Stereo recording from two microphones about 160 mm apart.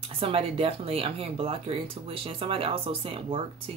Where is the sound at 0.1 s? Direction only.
35° right (ahead or behind).